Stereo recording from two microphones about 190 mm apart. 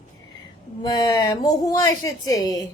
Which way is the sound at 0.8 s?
20° left (ahead or behind).